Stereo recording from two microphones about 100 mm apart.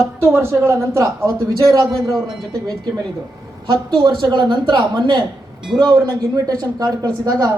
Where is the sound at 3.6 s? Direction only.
55° right (ahead or behind).